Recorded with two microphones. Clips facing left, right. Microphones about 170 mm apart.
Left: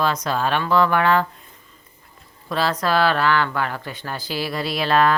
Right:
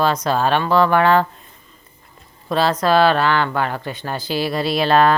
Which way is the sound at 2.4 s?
25° right (ahead or behind).